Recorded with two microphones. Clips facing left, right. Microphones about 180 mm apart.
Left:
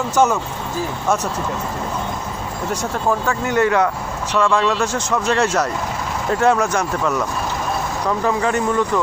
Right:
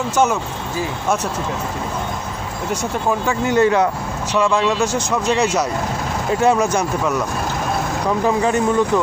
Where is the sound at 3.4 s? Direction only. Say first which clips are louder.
Right 3 dB; 25° right (ahead or behind).